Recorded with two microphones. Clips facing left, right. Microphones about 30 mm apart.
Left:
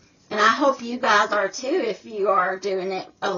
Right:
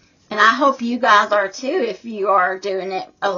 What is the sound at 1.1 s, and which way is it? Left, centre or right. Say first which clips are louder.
Speech: right 5 dB; right.